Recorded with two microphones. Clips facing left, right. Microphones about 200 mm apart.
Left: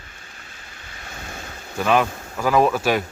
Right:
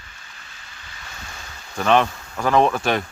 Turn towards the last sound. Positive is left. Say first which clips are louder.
# even
turn(degrees=5)  # may be behind; listen again after turning